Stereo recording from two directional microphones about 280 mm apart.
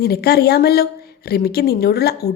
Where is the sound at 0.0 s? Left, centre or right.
Left.